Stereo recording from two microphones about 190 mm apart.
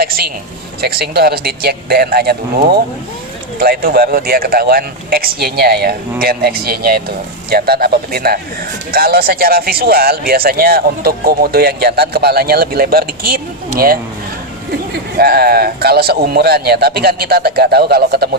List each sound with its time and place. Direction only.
0.8 s speech: 55° right (ahead or behind)
3.6 s speech: 50° right (ahead or behind)
15.2 s speech: 55° right (ahead or behind)